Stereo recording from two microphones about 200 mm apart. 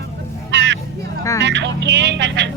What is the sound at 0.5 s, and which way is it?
Vehicle, 60° right (ahead or behind).